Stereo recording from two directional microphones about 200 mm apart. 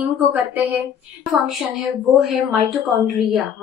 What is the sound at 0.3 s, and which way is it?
A woman's voice, 10° right (ahead or behind).